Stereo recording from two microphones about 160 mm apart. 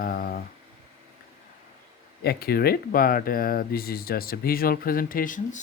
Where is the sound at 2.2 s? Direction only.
75° left (ahead or behind); by 5.5 s 55° left (ahead or behind).